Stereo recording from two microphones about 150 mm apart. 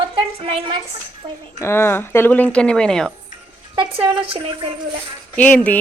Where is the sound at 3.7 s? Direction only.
35° right (ahead or behind).